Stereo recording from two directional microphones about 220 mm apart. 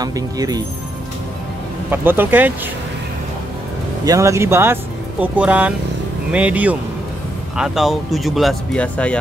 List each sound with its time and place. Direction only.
0.0 s speech: 15° right (ahead or behind)
1.9 s speech: 10° right (ahead or behind)
4.0 s speech: 15° right (ahead or behind); by 9.2 s 5° left (ahead or behind)